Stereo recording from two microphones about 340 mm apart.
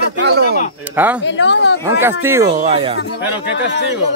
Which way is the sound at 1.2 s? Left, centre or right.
Left.